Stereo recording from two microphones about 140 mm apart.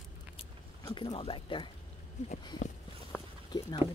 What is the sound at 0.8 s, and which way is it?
Speech, 30° left (ahead or behind).